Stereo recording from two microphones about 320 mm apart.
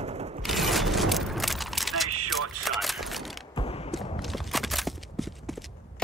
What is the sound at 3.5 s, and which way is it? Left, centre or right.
Mechanisms, centre.